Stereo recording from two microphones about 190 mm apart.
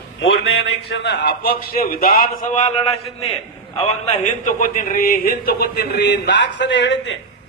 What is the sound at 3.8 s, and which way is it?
Speech, 40° left (ahead or behind).